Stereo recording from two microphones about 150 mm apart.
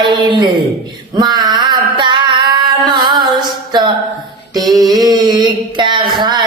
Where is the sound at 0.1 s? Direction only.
30° right (ahead or behind).